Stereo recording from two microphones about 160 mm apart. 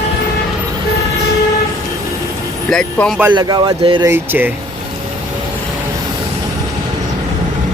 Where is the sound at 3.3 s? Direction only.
25° right (ahead or behind).